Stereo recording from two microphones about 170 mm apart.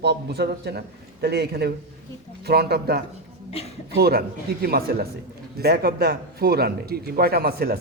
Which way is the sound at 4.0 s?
70° right (ahead or behind).